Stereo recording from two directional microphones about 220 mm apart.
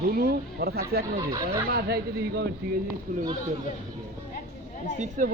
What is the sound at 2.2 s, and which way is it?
Speech, 50° right (ahead or behind).